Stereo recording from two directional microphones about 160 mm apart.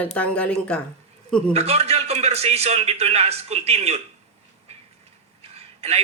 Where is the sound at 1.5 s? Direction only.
40° right (ahead or behind).